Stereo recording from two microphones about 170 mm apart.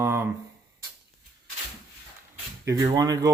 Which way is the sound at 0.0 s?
15° right (ahead or behind).